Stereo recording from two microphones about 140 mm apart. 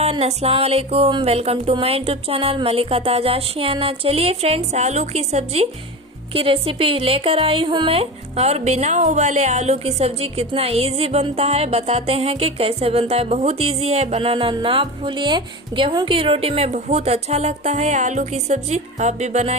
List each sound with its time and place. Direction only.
0.0 s speech: 50° right (ahead or behind)